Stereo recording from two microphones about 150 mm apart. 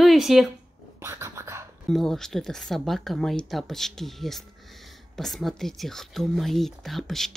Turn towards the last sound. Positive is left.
turn(degrees=0)  # may be behind; listen again after turning